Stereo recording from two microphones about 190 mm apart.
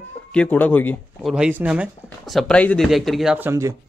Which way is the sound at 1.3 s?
5° right (ahead or behind).